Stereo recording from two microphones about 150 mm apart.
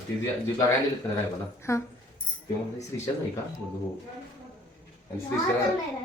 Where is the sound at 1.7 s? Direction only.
20° left (ahead or behind).